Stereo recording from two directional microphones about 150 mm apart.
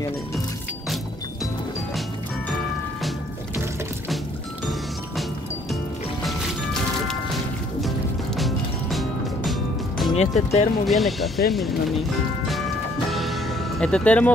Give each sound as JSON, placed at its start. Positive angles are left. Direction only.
{"t": 8.4, "sound": "music", "side_deg": 0}
{"t": 10.1, "sound": "speech", "side_deg": 45}
{"t": 10.9, "sound": "speech", "side_deg": 0}
{"t": 13.1, "sound": "music", "side_deg": 0}